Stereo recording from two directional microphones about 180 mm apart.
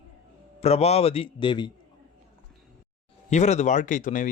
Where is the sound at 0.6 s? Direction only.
35° left (ahead or behind).